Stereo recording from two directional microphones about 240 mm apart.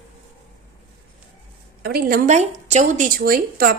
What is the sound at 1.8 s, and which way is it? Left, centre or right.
Speech, right.